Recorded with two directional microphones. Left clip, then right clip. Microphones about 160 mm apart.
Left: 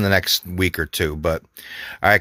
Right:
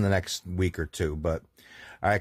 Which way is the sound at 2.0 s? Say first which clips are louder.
Left 10 dB; 30° left (ahead or behind).